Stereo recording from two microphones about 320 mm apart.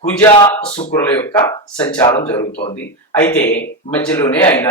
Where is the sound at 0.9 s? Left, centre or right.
Centre.